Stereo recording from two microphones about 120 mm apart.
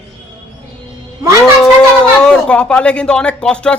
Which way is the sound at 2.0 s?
5° left (ahead or behind).